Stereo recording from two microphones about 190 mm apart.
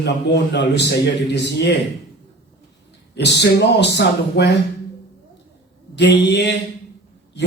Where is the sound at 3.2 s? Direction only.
65° left (ahead or behind).